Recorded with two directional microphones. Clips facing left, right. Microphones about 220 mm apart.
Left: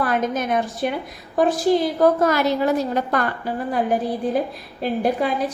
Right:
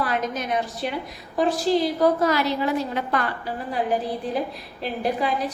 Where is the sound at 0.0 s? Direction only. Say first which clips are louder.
Left 4 dB; 50° left (ahead or behind).